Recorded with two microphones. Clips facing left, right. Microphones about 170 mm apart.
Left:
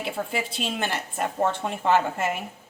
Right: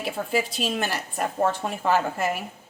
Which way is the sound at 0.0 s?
25° left (ahead or behind).